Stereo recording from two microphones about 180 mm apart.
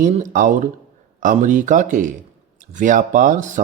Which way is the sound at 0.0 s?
45° right (ahead or behind).